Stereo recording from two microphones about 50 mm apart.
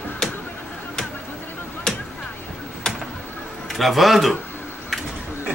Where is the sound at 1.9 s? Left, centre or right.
Centre.